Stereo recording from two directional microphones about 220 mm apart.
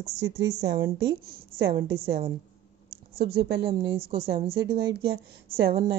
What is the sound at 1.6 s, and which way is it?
Speech, 45° right (ahead or behind).